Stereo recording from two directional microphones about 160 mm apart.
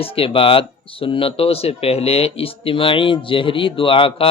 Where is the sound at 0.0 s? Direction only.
35° left (ahead or behind).